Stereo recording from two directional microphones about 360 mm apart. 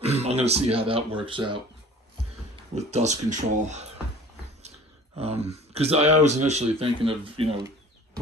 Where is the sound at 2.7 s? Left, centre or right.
Centre.